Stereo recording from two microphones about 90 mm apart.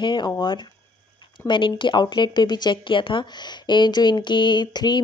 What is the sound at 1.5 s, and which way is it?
Speech, 60° left (ahead or behind).